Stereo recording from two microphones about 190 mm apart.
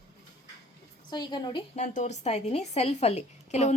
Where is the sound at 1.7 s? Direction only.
40° left (ahead or behind).